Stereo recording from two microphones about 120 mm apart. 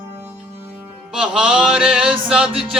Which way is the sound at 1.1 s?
5° right (ahead or behind).